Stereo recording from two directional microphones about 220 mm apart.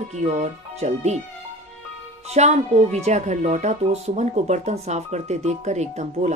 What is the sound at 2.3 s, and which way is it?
Speech, 30° right (ahead or behind).